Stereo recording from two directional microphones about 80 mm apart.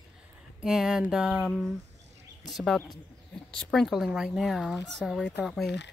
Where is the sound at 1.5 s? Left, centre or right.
Centre.